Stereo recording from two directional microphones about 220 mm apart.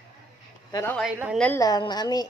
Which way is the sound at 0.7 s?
10° left (ahead or behind).